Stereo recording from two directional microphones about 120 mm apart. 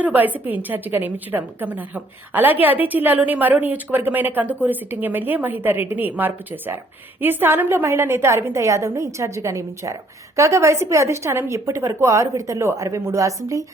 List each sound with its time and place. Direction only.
0.0 s a woman's voice: 15° right (ahead or behind)